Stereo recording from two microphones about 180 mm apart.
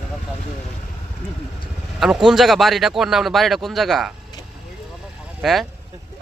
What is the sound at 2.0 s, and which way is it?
Speech, 5° right (ahead or behind).